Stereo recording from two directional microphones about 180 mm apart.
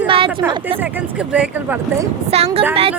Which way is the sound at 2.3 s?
35° right (ahead or behind).